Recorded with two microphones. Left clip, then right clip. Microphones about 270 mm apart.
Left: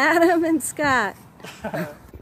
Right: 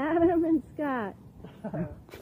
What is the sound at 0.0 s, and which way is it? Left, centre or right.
Speech, centre.